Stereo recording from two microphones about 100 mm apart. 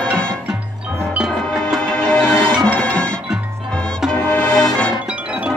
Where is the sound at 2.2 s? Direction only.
35° left (ahead or behind).